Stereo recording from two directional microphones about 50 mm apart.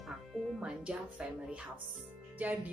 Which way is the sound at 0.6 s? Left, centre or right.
Right.